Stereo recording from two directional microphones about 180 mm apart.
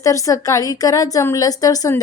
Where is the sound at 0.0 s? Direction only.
20° left (ahead or behind).